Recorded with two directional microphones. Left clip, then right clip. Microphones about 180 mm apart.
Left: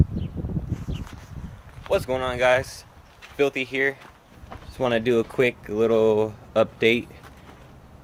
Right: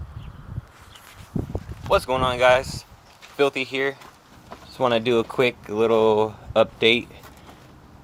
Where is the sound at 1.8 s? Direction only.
Centre (ahead or behind).